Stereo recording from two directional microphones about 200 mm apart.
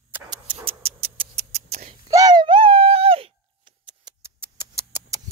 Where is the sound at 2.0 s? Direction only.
15° right (ahead or behind).